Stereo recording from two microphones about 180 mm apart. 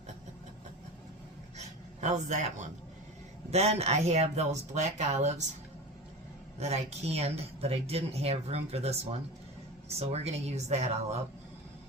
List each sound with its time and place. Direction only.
1.5 s a sound: 40° right (ahead or behind)
3.5 s speech: 35° right (ahead or behind)
6.6 s speech: 35° right (ahead or behind)